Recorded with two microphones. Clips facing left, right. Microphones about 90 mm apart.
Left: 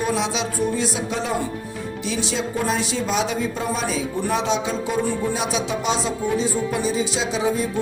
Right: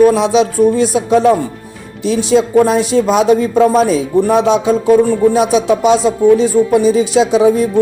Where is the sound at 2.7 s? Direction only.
50° right (ahead or behind).